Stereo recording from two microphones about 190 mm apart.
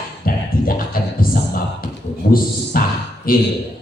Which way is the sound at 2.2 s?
50° left (ahead or behind).